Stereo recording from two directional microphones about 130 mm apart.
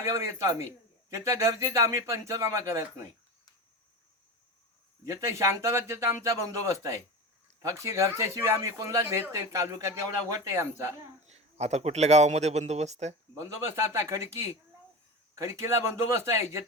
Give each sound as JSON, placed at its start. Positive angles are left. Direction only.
{"t": 0.0, "sound": "speech", "side_deg": -25}
{"t": 5.0, "sound": "speech", "side_deg": -25}
{"t": 11.3, "sound": "speech", "side_deg": -55}
{"t": 13.9, "sound": "speech", "side_deg": -20}